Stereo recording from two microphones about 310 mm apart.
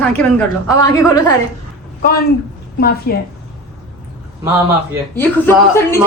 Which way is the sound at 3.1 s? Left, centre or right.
Left.